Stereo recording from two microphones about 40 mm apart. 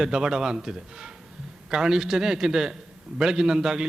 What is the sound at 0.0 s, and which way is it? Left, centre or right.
A man's voice, centre.